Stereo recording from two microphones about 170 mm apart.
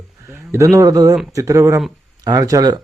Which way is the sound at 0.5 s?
20° right (ahead or behind).